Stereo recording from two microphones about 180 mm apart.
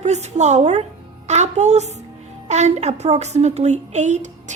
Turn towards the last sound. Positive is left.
turn(degrees=-40)  # may be behind; listen again after turning